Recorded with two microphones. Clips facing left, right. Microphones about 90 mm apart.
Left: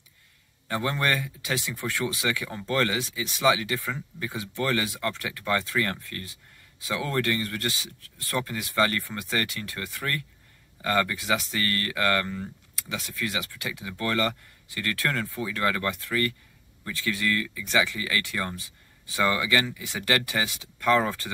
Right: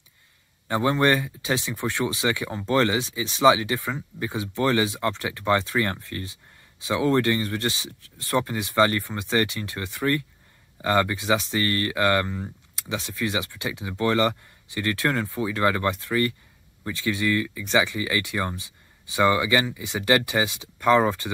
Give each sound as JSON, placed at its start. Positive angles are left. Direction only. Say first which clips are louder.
{"t": 0.7, "sound": "speech", "louder": "right 6 dB", "side_deg": -25}